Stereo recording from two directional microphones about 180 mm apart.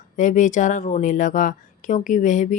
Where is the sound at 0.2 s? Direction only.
45° left (ahead or behind).